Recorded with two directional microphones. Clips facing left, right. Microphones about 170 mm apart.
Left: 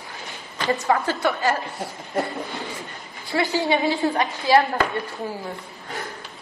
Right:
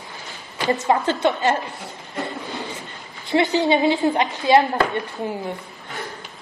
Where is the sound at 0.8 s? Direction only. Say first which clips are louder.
Right 3 dB; 20° right (ahead or behind).